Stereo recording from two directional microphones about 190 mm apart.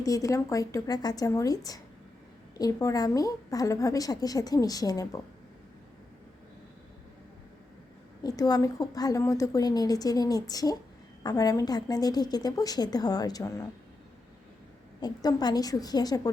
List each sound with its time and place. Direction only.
0.0 s a woman's voice: 20° left (ahead or behind)
8.2 s a woman's voice: 20° left (ahead or behind)
15.0 s a woman's voice: 20° left (ahead or behind)